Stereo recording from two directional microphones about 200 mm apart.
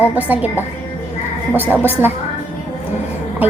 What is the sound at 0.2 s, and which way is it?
Speech, 10° right (ahead or behind).